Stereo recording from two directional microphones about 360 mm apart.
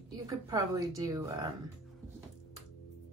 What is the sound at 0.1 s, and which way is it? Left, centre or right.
A woman's voice, centre.